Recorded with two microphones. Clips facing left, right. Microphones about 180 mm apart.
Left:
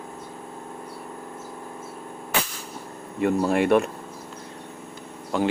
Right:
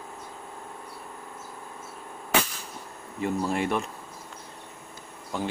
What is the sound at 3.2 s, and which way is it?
Speech, 65° left (ahead or behind).